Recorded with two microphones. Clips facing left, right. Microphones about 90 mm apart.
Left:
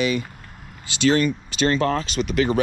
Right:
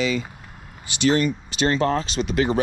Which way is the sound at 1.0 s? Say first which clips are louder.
Left 1 dB; 20° right (ahead or behind).